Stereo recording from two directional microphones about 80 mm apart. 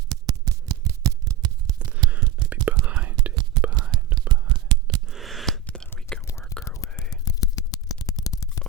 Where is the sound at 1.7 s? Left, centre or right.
Centre.